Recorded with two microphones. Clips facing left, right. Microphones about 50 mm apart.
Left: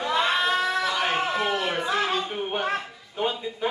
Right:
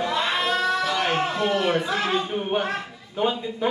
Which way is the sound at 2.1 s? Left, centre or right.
Centre.